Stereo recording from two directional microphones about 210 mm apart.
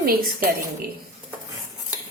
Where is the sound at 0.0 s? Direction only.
45° right (ahead or behind).